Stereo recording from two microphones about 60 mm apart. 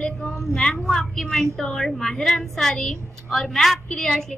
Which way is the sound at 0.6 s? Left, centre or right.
Centre.